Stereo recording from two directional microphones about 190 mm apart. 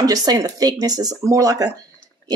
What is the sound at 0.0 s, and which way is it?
Speech, 20° right (ahead or behind).